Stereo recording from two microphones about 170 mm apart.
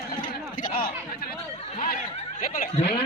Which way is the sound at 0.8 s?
65° left (ahead or behind).